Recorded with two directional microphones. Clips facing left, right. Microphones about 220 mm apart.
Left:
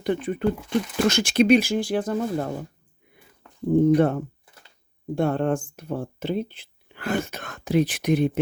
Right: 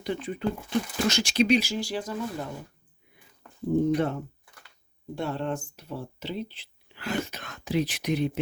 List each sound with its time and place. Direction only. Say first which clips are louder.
0.0 s speech: left 6 dB; 55° left (ahead or behind)
3.7 s speech: left 6 dB; 55° left (ahead or behind)